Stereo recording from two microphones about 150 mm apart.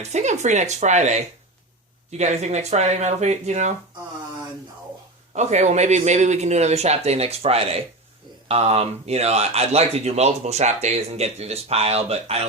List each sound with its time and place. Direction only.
0.0 s speech: 50° right (ahead or behind)
5.3 s speech: 50° right (ahead or behind)